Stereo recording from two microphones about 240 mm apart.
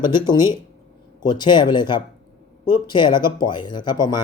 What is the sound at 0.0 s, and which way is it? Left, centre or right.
Speech, centre.